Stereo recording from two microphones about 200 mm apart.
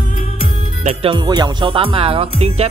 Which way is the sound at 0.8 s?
25° right (ahead or behind).